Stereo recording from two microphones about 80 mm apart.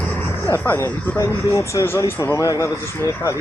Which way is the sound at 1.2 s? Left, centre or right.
Left.